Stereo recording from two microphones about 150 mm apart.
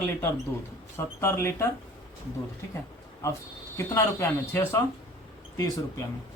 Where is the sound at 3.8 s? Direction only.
20° left (ahead or behind).